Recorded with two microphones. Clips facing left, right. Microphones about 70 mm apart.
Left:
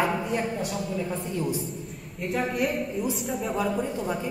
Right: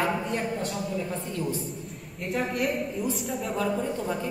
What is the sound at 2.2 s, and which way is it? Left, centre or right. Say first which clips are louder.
A woman's voice: left 1 dB; centre.